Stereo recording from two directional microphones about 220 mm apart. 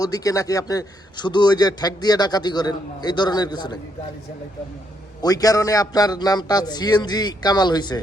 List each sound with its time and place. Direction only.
0.0 s a man's voice: 15° left (ahead or behind)
5.2 s a man's voice: 15° left (ahead or behind)